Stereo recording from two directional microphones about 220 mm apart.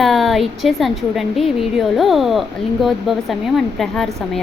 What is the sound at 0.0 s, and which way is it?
A woman's voice, centre (ahead or behind).